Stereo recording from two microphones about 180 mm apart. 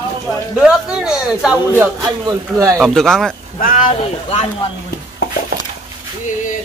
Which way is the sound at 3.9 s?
35° left (ahead or behind).